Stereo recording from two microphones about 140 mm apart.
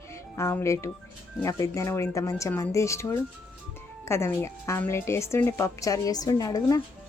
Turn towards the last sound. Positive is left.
turn(degrees=25)  # may be behind; listen again after turning